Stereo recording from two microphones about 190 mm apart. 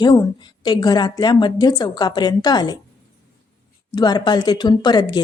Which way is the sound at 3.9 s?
20° left (ahead or behind).